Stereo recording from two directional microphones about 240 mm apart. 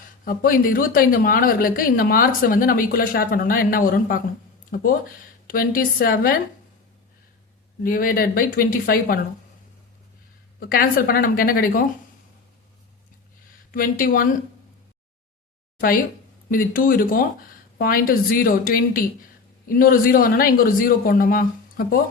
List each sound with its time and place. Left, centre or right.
0.3 s speech: left
7.9 s speech: left
10.6 s speech: left
13.7 s speech: left
16.5 s speech: left